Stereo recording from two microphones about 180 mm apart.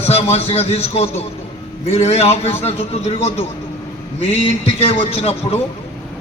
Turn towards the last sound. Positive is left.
turn(degrees=35)  # may be behind; listen again after turning